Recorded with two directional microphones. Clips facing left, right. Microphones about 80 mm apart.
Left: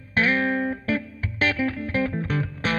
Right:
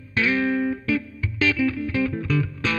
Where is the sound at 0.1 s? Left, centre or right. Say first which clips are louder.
Even; left.